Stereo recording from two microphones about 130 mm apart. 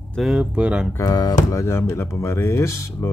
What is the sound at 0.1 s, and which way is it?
Speech, 5° right (ahead or behind).